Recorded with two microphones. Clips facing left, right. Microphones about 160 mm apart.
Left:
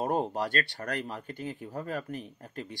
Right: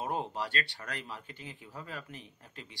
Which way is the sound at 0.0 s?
45° left (ahead or behind).